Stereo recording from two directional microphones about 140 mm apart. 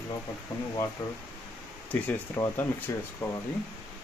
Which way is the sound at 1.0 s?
25° left (ahead or behind).